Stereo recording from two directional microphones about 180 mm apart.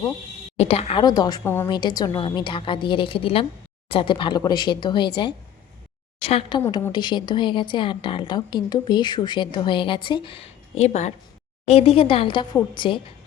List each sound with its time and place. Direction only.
0.5 s a woman's voice: 35° left (ahead or behind)
6.1 s a woman's voice: 30° left (ahead or behind)